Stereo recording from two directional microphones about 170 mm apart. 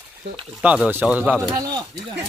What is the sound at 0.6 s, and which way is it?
Speech, 5° right (ahead or behind).